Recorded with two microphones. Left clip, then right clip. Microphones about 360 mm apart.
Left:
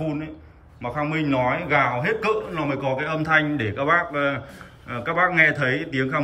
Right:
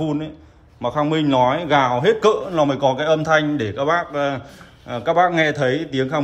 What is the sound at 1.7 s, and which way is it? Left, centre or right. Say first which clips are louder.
A man's voice: right 6 dB; centre.